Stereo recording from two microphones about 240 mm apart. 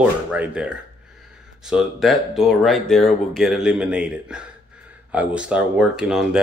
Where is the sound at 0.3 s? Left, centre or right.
Centre.